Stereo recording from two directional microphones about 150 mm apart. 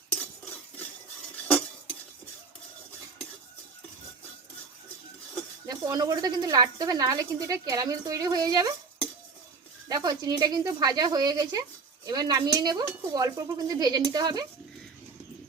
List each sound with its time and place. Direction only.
0.1 s cutlery: 10° left (ahead or behind)
5.6 s speech: 25° right (ahead or behind)
9.9 s speech: 25° right (ahead or behind)